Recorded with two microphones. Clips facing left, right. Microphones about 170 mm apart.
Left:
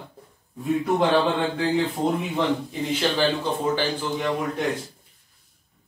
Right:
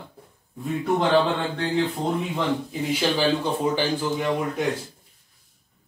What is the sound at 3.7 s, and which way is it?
Speech, 15° right (ahead or behind).